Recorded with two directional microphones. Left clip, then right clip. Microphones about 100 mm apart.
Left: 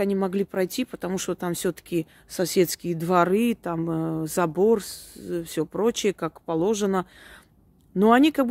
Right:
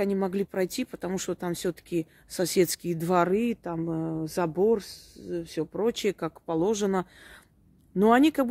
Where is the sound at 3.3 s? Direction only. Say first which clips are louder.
Left 4 dB; 35° left (ahead or behind).